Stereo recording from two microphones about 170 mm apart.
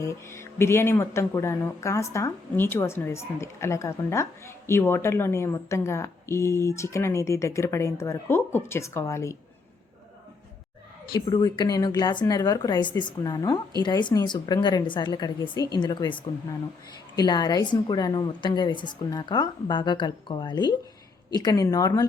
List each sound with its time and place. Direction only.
0.0 s speech: 15° left (ahead or behind)
11.1 s a woman's voice: 25° left (ahead or behind)